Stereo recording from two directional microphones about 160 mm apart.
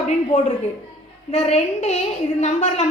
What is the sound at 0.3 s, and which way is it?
A woman's voice, 45° left (ahead or behind).